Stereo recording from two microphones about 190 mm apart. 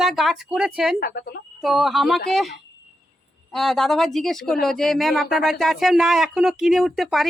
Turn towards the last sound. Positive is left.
turn(degrees=0)  # may be behind; listen again after turning